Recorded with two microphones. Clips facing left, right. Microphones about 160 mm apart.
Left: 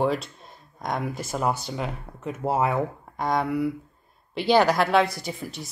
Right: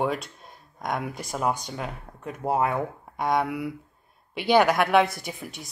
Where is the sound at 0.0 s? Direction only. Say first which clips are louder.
Left 3 dB; centre (ahead or behind).